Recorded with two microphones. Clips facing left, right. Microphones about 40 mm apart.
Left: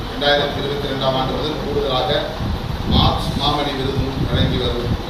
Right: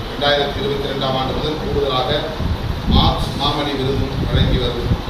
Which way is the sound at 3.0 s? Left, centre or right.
Right.